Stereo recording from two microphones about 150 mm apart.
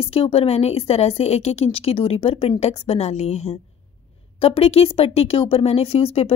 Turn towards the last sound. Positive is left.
turn(degrees=40)  # may be behind; listen again after turning